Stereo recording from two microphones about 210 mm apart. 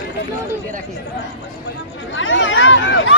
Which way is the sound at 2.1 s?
65° left (ahead or behind).